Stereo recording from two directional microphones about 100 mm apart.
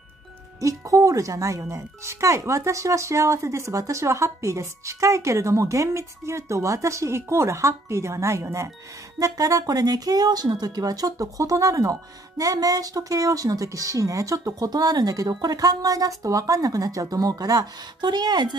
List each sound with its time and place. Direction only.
0.6 s speech: 35° right (ahead or behind)